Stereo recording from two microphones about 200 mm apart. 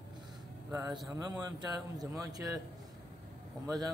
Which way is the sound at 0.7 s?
15° right (ahead or behind).